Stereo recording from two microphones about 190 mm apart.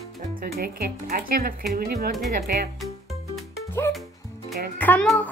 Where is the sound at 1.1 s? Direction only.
50° right (ahead or behind).